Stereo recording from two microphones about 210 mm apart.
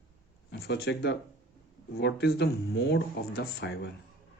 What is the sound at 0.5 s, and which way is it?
Speech, 55° left (ahead or behind).